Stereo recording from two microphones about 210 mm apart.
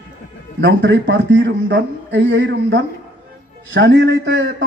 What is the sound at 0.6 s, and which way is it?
Speech, 55° right (ahead or behind).